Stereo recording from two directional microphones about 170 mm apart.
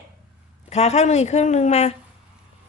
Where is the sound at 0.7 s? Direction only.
40° left (ahead or behind).